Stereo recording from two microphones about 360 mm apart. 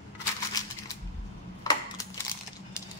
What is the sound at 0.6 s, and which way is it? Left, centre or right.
Crushing, centre.